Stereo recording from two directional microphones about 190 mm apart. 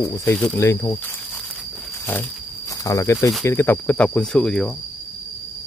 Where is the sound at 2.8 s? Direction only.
15° left (ahead or behind).